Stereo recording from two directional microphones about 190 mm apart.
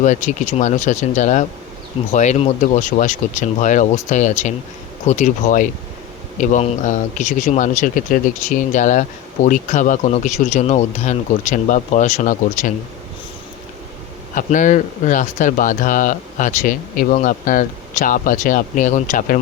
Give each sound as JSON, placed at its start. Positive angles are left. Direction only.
{"t": 0.0, "sound": "speech", "side_deg": 40}
{"t": 14.3, "sound": "speech", "side_deg": 40}